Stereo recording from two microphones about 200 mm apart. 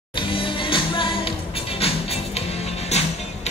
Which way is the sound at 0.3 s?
25° left (ahead or behind).